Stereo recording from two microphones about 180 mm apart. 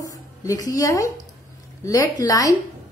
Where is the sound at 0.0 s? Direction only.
20° left (ahead or behind).